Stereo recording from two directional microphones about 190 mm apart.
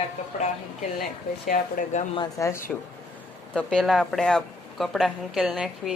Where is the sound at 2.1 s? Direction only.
20° left (ahead or behind).